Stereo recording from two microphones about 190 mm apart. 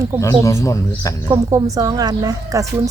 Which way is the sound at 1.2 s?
20° right (ahead or behind).